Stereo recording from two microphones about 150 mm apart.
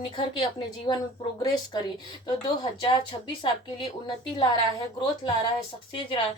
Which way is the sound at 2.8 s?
35° left (ahead or behind).